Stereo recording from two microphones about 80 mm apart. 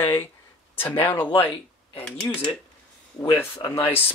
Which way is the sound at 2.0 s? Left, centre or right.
Centre.